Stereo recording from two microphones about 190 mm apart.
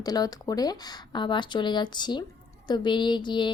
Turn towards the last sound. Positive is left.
turn(degrees=25)  # may be behind; listen again after turning